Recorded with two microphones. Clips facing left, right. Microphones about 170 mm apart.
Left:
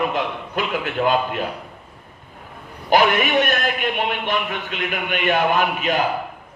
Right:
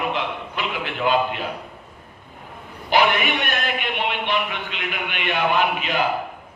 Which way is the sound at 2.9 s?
45° left (ahead or behind).